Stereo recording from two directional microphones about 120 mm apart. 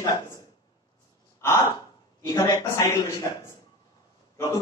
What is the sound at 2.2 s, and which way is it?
Speech, 30° left (ahead or behind).